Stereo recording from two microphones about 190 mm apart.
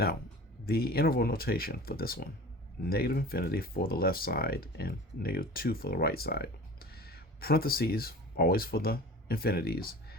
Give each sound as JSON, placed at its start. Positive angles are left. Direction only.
{"t": 0.6, "sound": "speech", "side_deg": 55}